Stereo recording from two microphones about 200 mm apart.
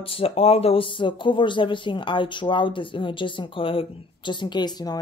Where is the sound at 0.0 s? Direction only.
30° left (ahead or behind).